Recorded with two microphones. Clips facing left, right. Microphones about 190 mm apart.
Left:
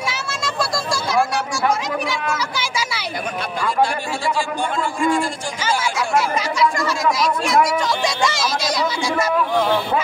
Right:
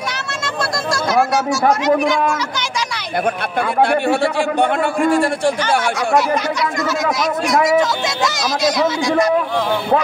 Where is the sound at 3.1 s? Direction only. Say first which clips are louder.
Right 9 dB; 60° right (ahead or behind).